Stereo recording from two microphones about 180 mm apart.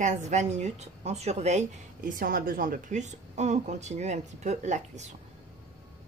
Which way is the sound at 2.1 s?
50° right (ahead or behind).